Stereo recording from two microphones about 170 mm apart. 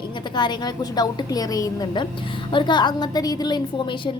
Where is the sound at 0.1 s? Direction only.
25° left (ahead or behind).